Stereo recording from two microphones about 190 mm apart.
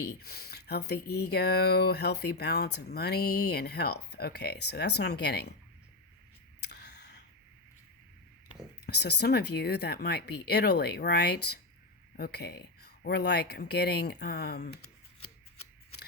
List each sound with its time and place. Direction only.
0.0 s speech: 60° left (ahead or behind)
6.6 s a sound: 60° left (ahead or behind)
8.9 s speech: 60° left (ahead or behind)